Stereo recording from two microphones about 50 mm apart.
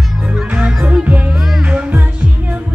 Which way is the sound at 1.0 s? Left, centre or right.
Right.